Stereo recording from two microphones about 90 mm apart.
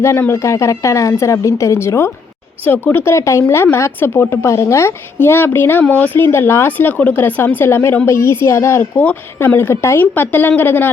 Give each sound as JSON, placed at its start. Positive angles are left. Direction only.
{"t": 0.0, "sound": "a woman's voice", "side_deg": 30}
{"t": 8.8, "sound": "a woman's voice", "side_deg": 20}